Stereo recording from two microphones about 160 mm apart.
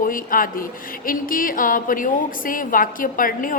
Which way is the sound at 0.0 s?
60° left (ahead or behind).